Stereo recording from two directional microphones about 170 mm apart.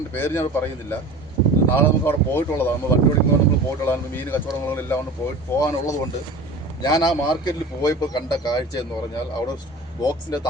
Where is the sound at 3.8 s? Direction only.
10° left (ahead or behind).